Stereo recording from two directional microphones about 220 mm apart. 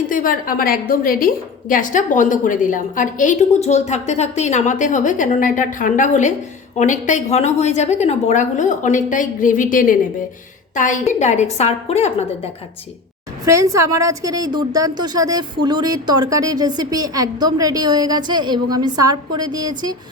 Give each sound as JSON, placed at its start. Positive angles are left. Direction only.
{"t": 0.1, "sound": "a woman's voice", "side_deg": 40}
{"t": 13.4, "sound": "a woman's voice", "side_deg": -15}